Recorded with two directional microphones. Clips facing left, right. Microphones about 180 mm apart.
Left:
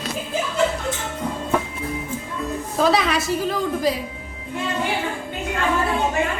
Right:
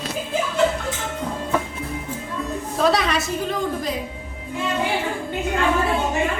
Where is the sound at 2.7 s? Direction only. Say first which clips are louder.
Left 1 dB; centre (ahead or behind).